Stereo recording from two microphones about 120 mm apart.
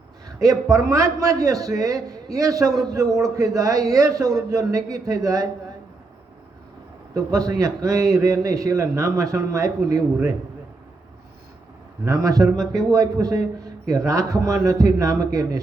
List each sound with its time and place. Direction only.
0.3 s a man's voice: 30° right (ahead or behind)
7.1 s a man's voice: 30° right (ahead or behind)
12.0 s a man's voice: 30° right (ahead or behind)